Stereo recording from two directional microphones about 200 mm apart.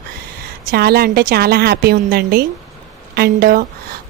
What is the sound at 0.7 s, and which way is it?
A woman's voice, 50° right (ahead or behind).